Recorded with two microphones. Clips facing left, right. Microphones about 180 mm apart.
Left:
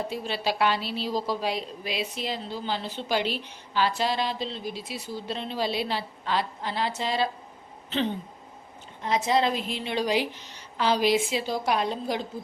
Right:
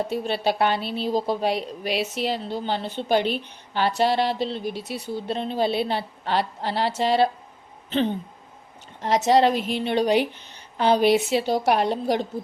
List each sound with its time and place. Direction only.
0.1 s a woman's voice: 60° right (ahead or behind)
6.2 s a woman's voice: 65° right (ahead or behind)
9.0 s a woman's voice: 75° right (ahead or behind); by 11.2 s 55° right (ahead or behind)
11.3 s a woman's voice: 70° right (ahead or behind)